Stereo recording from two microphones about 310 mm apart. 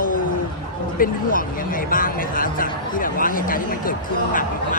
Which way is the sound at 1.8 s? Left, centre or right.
Left.